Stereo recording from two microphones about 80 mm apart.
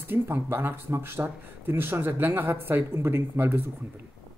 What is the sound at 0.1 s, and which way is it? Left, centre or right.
Speech, right.